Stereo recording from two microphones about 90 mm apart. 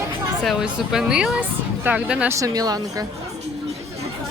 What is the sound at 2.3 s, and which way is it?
Speech, 35° right (ahead or behind).